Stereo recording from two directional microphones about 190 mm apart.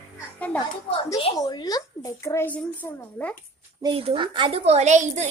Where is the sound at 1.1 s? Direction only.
20° left (ahead or behind).